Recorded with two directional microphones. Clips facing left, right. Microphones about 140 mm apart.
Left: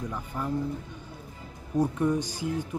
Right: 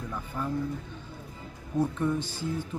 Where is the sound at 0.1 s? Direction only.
10° left (ahead or behind).